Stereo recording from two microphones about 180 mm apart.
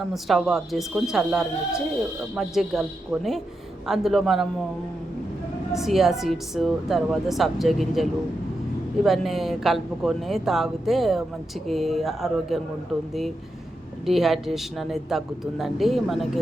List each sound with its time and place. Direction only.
0.0 s speech: centre (ahead or behind)
5.7 s speech: centre (ahead or behind)
9.0 s speech: centre (ahead or behind)
14.0 s speech: centre (ahead or behind)